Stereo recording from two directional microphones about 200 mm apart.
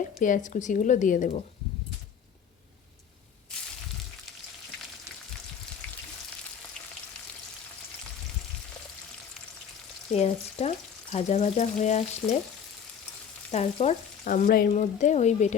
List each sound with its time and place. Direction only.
0.2 s speech: 40° left (ahead or behind)
10.1 s speech: 30° left (ahead or behind)
13.5 s speech: 35° left (ahead or behind)